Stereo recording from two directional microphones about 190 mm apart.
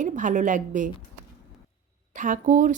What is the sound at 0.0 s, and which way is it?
Speech, 40° right (ahead or behind).